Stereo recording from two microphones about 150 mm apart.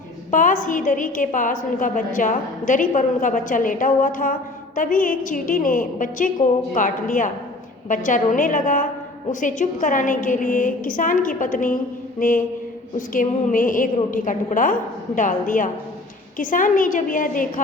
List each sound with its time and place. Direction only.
0.3 s a woman's voice: 60° left (ahead or behind)